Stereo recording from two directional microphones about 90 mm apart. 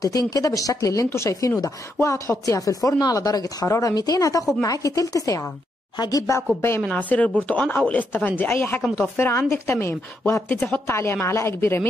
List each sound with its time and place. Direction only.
0.3 s speech: 40° left (ahead or behind)
6.8 s a woman's voice: 15° left (ahead or behind)